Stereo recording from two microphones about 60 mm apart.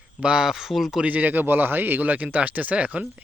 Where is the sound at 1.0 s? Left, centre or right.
Right.